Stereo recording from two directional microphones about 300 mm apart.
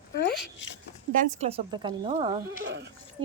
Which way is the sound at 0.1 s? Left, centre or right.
Left.